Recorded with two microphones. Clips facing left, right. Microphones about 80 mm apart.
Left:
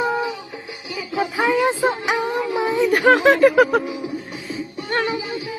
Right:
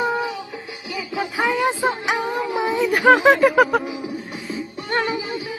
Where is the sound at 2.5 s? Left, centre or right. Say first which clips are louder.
Left 1 dB; centre.